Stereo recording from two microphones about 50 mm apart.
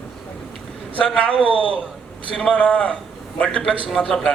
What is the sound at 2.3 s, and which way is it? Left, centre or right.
Speech, left.